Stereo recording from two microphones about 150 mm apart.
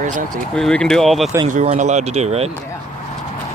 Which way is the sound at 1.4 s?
55° right (ahead or behind).